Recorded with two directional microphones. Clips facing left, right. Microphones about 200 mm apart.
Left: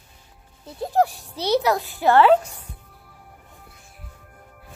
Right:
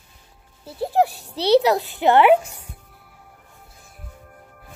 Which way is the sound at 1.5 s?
20° right (ahead or behind).